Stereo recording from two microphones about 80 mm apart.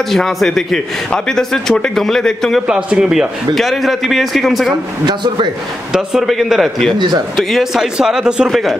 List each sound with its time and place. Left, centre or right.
0.1 s a man's voice: centre
2.6 s a man's voice: centre
5.0 s a man's voice: right
5.9 s a man's voice: centre